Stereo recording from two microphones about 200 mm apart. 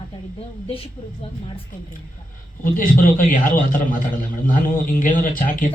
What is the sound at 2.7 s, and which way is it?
A man's voice, 45° left (ahead or behind).